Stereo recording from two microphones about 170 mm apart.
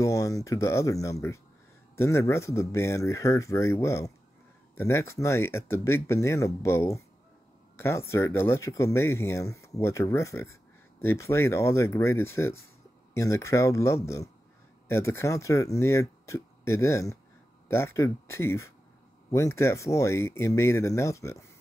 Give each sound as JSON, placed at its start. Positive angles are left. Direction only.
{"t": 0.0, "sound": "speech", "side_deg": 20}